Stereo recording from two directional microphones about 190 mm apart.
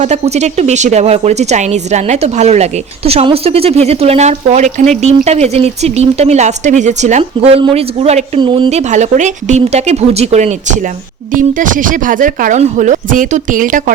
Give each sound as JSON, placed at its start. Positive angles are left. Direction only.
{"t": 0.0, "sound": "speech", "side_deg": -35}